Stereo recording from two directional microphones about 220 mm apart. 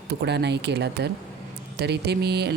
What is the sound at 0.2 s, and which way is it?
Speech, 50° right (ahead or behind).